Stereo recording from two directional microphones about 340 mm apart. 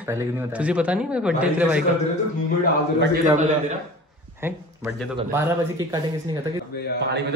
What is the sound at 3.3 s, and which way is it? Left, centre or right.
Speech, right.